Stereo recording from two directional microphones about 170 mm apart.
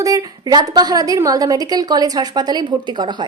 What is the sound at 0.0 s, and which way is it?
A woman's voice, 20° right (ahead or behind).